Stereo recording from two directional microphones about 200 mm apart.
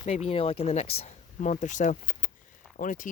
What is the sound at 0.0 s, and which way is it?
Speech, 30° left (ahead or behind).